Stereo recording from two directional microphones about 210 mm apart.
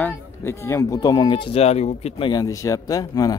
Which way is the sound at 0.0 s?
10° left (ahead or behind).